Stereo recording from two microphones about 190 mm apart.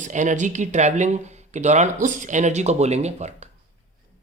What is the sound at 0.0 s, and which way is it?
Speech, 40° right (ahead or behind).